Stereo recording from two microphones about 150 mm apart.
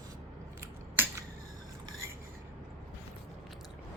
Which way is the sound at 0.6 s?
20° right (ahead or behind).